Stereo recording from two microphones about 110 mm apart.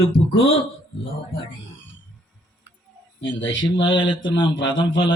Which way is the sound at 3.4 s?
45° left (ahead or behind).